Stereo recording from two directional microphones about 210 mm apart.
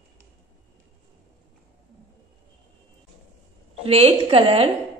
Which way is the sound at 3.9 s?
30° right (ahead or behind).